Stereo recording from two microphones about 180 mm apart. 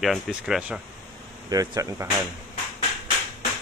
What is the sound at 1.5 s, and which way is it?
Speech, 20° right (ahead or behind).